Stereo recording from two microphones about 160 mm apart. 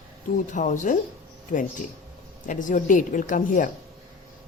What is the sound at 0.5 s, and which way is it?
Speech, 50° left (ahead or behind).